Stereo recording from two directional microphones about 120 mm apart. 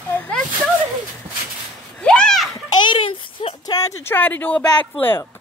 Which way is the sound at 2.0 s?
5° left (ahead or behind).